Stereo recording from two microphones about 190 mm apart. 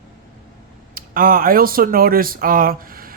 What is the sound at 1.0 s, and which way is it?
Speech, 50° right (ahead or behind).